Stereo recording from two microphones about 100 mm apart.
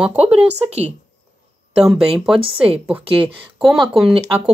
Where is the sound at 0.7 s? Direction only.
90° right.